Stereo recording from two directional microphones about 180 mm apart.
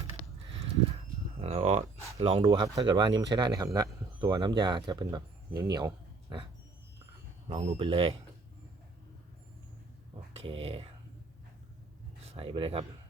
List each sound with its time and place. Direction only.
1.4 s a sound: 35° right (ahead or behind)
2.1 s speech: 35° right (ahead or behind)
5.7 s a sound: 20° right (ahead or behind)
7.4 s speech: 40° right (ahead or behind)
10.3 s speech: 30° right (ahead or behind)
12.2 s speech: 35° right (ahead or behind)